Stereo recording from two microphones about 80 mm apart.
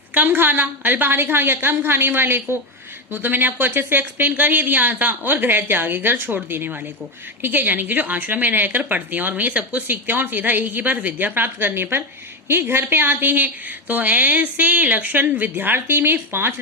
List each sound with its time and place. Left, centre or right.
0.1 s a woman's voice: right